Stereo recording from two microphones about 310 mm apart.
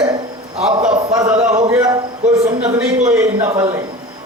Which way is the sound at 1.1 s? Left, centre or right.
Centre.